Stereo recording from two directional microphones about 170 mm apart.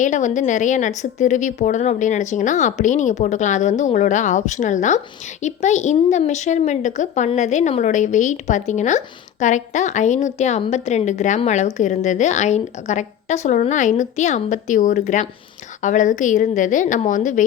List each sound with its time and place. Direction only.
0.0 s a woman's voice: 45° left (ahead or behind)